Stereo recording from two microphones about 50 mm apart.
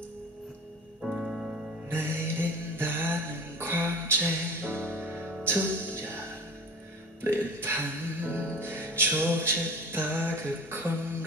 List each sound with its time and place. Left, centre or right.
1.0 s music: centre
1.9 s music: right
7.3 s music: right